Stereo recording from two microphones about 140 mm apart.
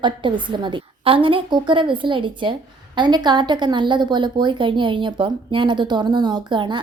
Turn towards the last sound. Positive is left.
turn(degrees=-35)  # may be behind; listen again after turning